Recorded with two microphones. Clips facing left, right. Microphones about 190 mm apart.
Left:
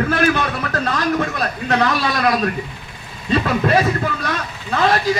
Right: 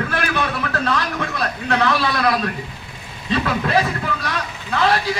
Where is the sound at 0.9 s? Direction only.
45° left (ahead or behind).